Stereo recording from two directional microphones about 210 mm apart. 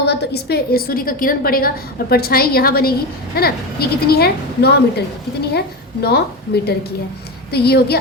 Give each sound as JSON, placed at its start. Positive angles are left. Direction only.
{"t": 0.0, "sound": "a woman's voice", "side_deg": 50}